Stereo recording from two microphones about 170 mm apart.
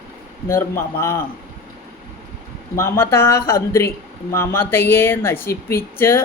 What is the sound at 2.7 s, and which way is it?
Speech, 15° left (ahead or behind).